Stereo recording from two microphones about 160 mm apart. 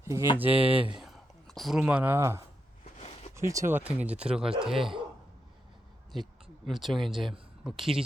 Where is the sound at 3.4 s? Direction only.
20° right (ahead or behind); by 4.9 s centre (ahead or behind).